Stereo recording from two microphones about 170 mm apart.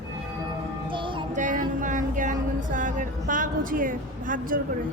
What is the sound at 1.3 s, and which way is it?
Music, 50° right (ahead or behind).